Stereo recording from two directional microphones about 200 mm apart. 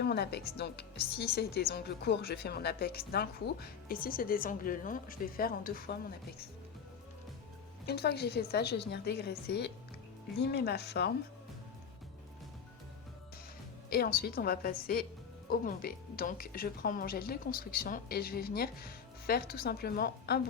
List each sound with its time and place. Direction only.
0.0 s a woman's voice: 55° left (ahead or behind)
7.9 s a woman's voice: 55° left (ahead or behind)
13.9 s speech: 50° left (ahead or behind)